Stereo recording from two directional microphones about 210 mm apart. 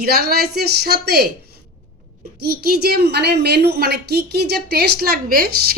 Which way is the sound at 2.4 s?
45° right (ahead or behind).